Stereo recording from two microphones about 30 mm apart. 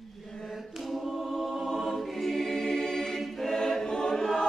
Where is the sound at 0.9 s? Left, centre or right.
Centre.